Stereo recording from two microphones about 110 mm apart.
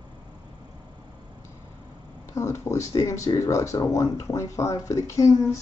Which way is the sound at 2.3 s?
25° left (ahead or behind).